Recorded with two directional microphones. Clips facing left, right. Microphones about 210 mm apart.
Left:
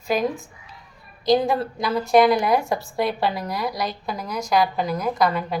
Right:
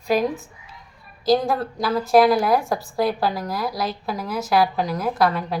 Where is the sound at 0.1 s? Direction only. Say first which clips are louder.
Right 2 dB; centre (ahead or behind).